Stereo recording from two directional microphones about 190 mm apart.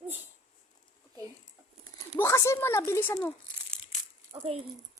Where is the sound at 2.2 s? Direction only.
15° left (ahead or behind).